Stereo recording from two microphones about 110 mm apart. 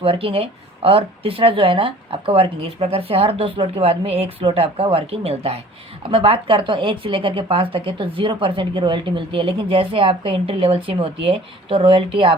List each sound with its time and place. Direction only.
0.0 s a woman's voice: 55° right (ahead or behind)